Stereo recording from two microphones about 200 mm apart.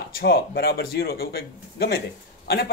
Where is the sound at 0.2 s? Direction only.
50° left (ahead or behind).